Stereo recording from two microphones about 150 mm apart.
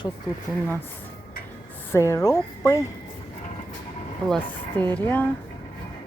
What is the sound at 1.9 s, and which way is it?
Speech, 20° left (ahead or behind).